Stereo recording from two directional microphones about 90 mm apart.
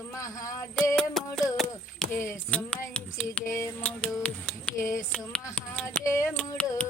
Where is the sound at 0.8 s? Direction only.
5° left (ahead or behind).